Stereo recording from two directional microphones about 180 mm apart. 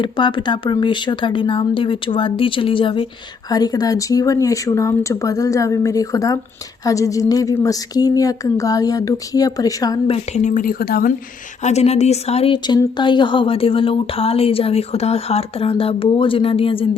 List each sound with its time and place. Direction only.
0.0 s speech: 25° left (ahead or behind)
10.1 s a woman's voice: 40° left (ahead or behind); by 11.1 s 55° left (ahead or behind)
11.6 s speech: 35° left (ahead or behind)